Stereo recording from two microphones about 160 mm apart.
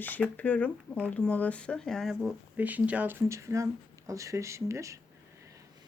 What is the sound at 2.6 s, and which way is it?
Speech, 10° right (ahead or behind).